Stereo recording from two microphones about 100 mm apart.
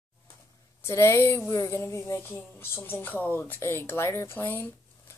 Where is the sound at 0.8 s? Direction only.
25° left (ahead or behind).